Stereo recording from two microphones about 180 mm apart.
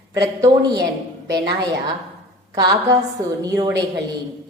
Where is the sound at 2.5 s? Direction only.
20° right (ahead or behind).